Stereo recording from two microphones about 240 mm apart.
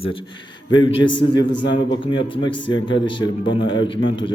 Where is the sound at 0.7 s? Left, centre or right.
Left.